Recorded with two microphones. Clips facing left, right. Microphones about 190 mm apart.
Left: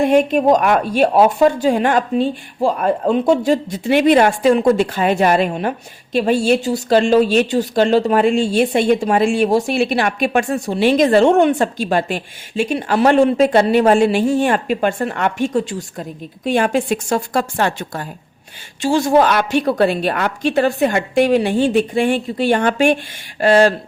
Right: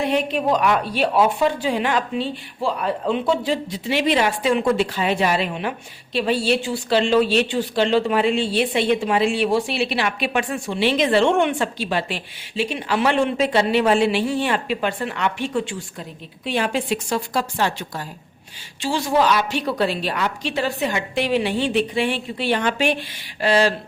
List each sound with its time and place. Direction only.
0.0 s a woman's voice: 50° left (ahead or behind)